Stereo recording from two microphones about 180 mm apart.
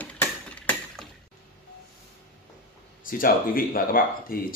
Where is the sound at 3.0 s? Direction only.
50° left (ahead or behind).